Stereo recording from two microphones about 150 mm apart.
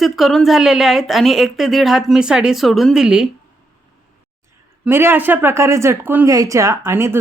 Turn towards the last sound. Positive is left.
turn(degrees=-15)  # may be behind; listen again after turning